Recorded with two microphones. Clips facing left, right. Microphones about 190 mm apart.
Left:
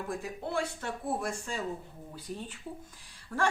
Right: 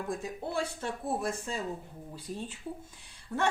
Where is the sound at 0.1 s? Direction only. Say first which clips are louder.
Left 1 dB; 25° right (ahead or behind).